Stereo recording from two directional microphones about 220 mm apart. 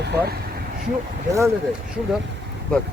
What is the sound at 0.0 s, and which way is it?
Speech, 45° right (ahead or behind).